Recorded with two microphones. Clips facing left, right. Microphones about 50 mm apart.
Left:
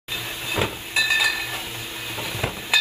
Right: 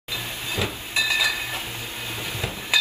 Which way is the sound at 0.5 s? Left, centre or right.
Left.